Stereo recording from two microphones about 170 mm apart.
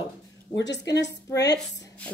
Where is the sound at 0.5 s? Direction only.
90° left.